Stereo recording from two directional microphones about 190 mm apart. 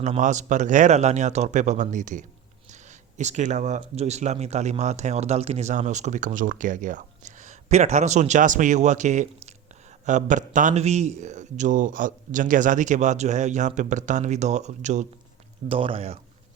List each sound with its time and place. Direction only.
0.0 s speech: 40° right (ahead or behind)
15.7 s speech: 30° right (ahead or behind)